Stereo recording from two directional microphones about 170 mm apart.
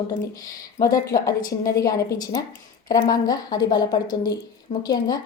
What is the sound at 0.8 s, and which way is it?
Speech, 20° left (ahead or behind).